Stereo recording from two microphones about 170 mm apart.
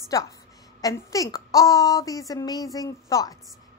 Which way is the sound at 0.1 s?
20° left (ahead or behind).